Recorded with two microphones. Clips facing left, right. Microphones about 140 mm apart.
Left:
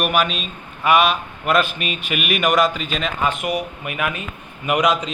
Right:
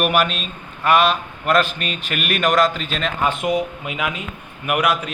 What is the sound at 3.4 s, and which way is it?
Speech, 25° right (ahead or behind).